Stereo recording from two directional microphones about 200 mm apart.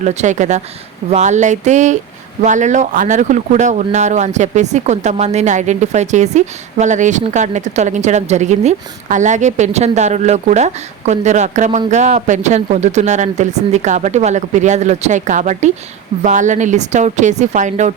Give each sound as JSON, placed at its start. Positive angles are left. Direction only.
{"t": 0.0, "sound": "speech", "side_deg": -35}